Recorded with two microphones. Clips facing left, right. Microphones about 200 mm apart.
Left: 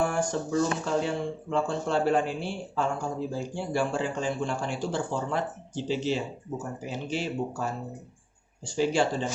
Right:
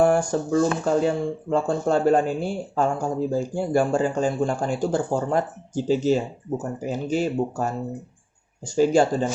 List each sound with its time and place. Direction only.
0.0 s speech: 45° right (ahead or behind)